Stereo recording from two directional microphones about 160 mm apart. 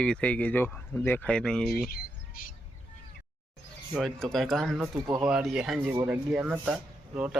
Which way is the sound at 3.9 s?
Centre (ahead or behind).